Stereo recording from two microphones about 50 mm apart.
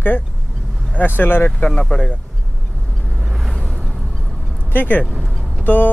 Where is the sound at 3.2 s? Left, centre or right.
Centre.